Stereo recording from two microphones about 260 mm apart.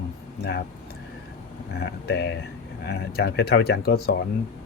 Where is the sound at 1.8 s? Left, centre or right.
Left.